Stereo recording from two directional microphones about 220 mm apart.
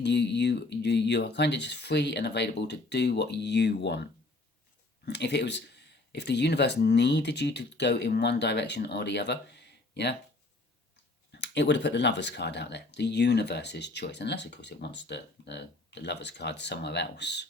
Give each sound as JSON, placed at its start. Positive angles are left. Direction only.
{"t": 0.0, "sound": "speech", "side_deg": 50}
{"t": 5.0, "sound": "speech", "side_deg": 50}
{"t": 11.3, "sound": "speech", "side_deg": 50}